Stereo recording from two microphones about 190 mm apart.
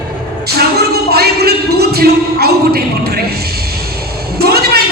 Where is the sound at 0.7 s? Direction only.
55° right (ahead or behind).